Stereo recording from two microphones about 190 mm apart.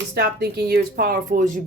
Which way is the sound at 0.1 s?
60° right (ahead or behind).